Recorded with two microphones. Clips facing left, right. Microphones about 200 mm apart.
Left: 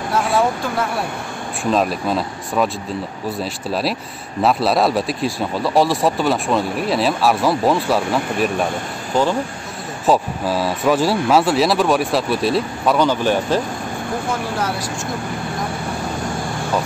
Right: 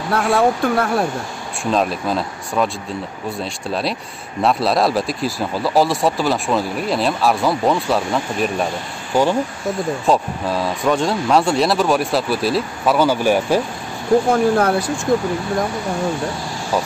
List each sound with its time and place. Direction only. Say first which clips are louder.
0.1 s speech: right 2 dB; 60° right (ahead or behind)
1.6 s speech: left 1 dB; centre (ahead or behind)
4.4 s speech: even; centre (ahead or behind)
9.1 s speech: right 1 dB; 10° right (ahead or behind)
10.0 s speech: left 3 dB; centre (ahead or behind)
14.3 s speech: right 8 dB; 55° right (ahead or behind)